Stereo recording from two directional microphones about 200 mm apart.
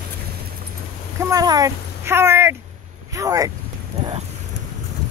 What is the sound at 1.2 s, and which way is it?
Speech, 20° right (ahead or behind).